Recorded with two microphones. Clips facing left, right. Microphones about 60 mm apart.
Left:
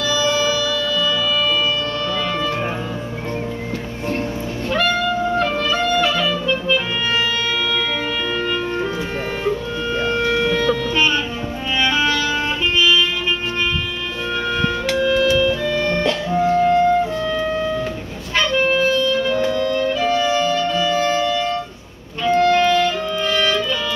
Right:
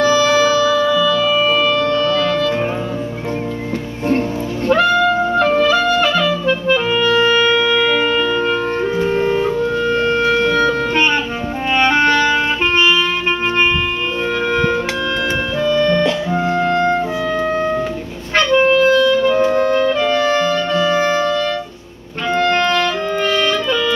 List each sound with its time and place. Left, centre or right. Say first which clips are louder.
0.0 s music: right 6 dB; right
0.5 s music: right 7 dB; right
8.0 s music: right 6 dB; right
9.8 s a sound: right 2 dB; right
11.7 s music: right 5 dB; right
14.6 s music: right 2 dB; right
15.2 s music: left 4 dB; right
15.6 s music: right 5 dB; right
16.1 s music: even; right
16.5 s music: left 2 dB; right
19.5 s music: right 5 dB; right
22.3 s music: left 1 dB; right